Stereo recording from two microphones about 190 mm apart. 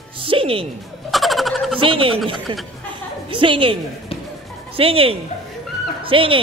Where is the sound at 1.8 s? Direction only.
30° right (ahead or behind).